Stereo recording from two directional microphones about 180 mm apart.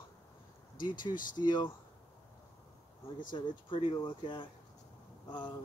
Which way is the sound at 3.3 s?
30° left (ahead or behind).